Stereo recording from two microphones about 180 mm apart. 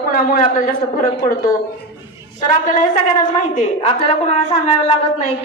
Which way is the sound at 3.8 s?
35° left (ahead or behind).